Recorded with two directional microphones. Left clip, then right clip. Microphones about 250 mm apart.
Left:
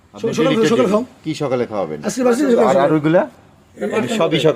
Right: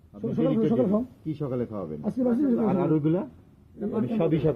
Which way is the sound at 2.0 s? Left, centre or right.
Centre.